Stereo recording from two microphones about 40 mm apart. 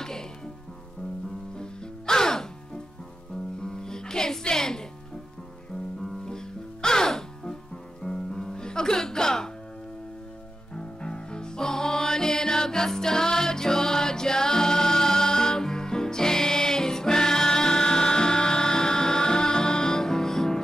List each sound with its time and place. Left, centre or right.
0.0 s music: centre
1.6 s music: centre
6.0 s music: centre
10.7 s music: left